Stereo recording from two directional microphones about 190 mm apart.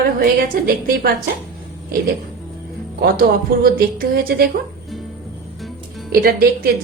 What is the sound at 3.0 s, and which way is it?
A woman's voice, 55° right (ahead or behind).